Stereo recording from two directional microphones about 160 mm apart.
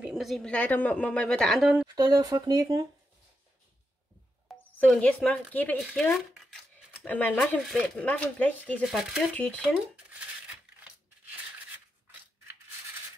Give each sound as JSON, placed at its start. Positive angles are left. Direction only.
{"t": 0.0, "sound": "a woman's voice", "side_deg": 0}
{"t": 2.0, "sound": "speech", "side_deg": -25}
{"t": 4.7, "sound": "a woman's voice", "side_deg": 5}
{"t": 8.8, "sound": "speech", "side_deg": 0}
{"t": 10.1, "sound": "a sound", "side_deg": -10}